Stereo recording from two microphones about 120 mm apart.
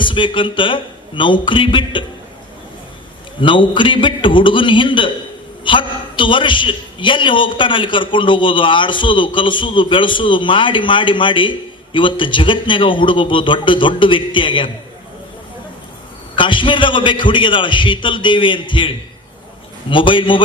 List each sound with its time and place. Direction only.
0.0 s a man's voice: 45° left (ahead or behind)
3.4 s a man's voice: 45° left (ahead or behind)
16.3 s a man's voice: 45° left (ahead or behind)
19.9 s a man's voice: 45° left (ahead or behind)